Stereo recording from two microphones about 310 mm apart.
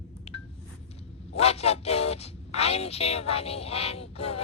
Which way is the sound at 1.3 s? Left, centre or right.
Centre.